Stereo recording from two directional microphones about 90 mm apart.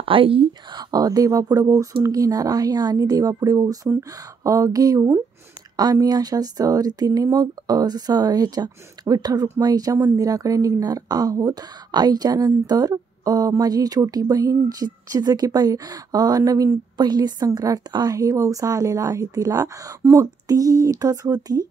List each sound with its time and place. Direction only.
0.0 s speech: 85° right
0.5 s a woman's voice: 50° right (ahead or behind)
16.9 s a woman's voice: 50° right (ahead or behind)